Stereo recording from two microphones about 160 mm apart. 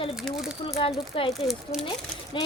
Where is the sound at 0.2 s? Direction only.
Centre (ahead or behind).